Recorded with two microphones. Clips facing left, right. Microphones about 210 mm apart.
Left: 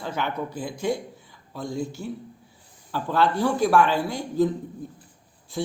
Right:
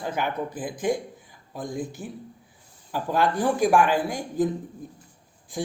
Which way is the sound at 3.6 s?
15° right (ahead or behind).